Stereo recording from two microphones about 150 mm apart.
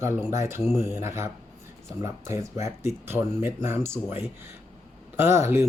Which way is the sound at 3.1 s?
15° right (ahead or behind).